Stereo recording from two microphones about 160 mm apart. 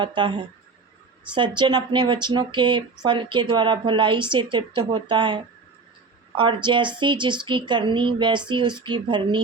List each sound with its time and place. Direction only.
0.0 s speech: 30° right (ahead or behind)